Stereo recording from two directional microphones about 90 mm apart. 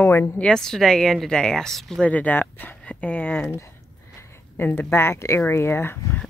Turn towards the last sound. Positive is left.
turn(degrees=25)  # may be behind; listen again after turning